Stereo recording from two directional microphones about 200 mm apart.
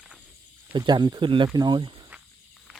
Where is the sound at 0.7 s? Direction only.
20° right (ahead or behind).